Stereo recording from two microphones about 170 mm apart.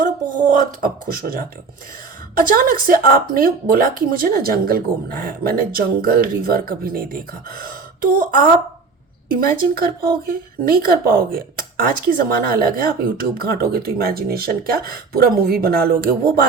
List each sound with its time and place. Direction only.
0.0 s speech: 50° right (ahead or behind)